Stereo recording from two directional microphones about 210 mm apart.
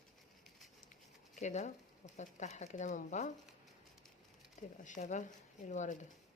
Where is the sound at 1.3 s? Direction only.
35° left (ahead or behind).